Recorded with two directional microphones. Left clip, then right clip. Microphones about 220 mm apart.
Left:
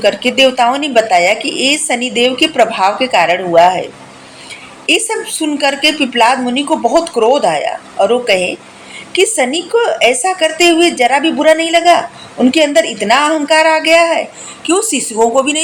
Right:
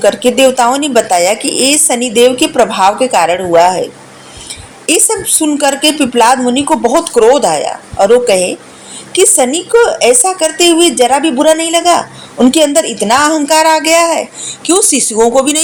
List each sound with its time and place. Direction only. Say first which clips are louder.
0.0 s speech: right 2 dB; 35° right (ahead or behind)
4.9 s speech: right 1 dB; 35° right (ahead or behind)